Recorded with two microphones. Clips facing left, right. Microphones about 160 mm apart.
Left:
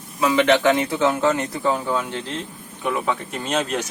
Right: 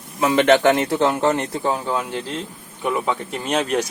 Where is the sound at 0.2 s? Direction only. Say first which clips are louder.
Right 2 dB; 50° right (ahead or behind).